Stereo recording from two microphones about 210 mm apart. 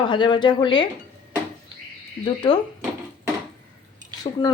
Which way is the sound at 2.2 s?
20° left (ahead or behind).